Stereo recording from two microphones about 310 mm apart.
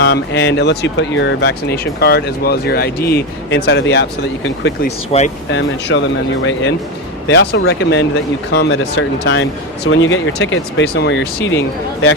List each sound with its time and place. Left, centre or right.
0.0 s speech: left
5.1 s speech: centre
5.5 s speech: left